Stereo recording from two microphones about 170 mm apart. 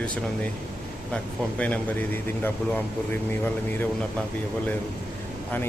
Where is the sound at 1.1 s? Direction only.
10° left (ahead or behind).